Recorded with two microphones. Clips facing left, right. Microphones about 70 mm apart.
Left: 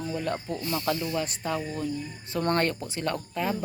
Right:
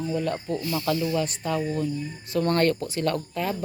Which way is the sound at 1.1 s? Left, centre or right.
Left.